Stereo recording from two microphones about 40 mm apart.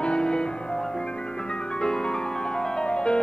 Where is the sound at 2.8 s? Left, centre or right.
Left.